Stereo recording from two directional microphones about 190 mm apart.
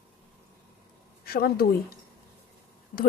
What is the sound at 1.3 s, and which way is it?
Speech, 50° left (ahead or behind).